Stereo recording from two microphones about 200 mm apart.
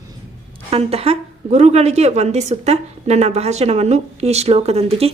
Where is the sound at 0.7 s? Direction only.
30° right (ahead or behind).